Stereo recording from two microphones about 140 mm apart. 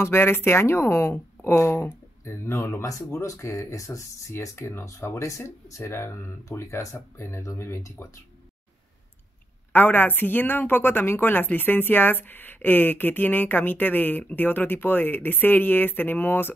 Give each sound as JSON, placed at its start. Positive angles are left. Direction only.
{"t": 0.0, "sound": "speech", "side_deg": 15}
{"t": 9.7, "sound": "a woman's voice", "side_deg": 15}